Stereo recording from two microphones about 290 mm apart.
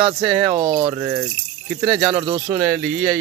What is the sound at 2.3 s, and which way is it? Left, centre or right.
Speech, centre.